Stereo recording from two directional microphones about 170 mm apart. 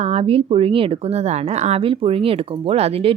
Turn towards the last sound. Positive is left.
turn(degrees=-35)  # may be behind; listen again after turning